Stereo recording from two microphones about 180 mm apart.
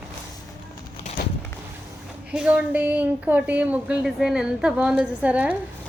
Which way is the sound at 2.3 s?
5° right (ahead or behind).